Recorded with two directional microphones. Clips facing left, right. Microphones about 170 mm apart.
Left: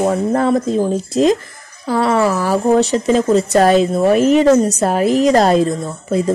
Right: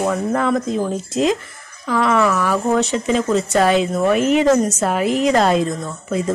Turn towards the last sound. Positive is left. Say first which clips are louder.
# left 4 dB
turn(degrees=35)  # may be behind; listen again after turning